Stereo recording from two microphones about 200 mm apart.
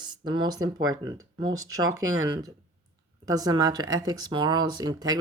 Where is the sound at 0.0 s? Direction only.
20° right (ahead or behind).